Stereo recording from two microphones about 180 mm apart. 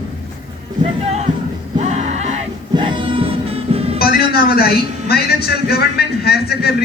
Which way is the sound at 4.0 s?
60° left (ahead or behind).